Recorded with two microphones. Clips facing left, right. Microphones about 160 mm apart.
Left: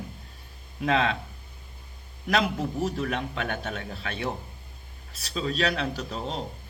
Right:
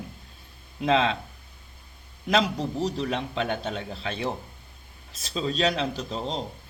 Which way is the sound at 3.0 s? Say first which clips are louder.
Right 2 dB; 25° right (ahead or behind).